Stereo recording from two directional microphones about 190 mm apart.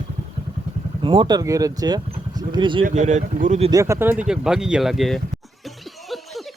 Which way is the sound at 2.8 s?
40° right (ahead or behind).